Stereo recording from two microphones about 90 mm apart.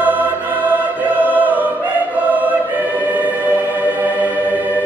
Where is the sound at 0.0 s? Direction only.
20° right (ahead or behind).